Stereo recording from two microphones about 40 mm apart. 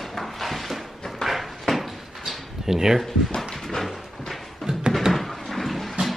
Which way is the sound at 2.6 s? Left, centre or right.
Centre.